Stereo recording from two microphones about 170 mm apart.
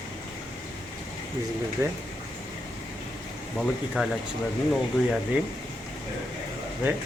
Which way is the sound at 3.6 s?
Centre (ahead or behind).